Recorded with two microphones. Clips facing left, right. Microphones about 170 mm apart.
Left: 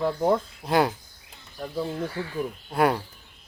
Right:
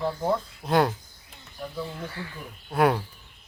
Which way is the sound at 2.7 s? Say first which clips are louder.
Right 1 dB; centre (ahead or behind).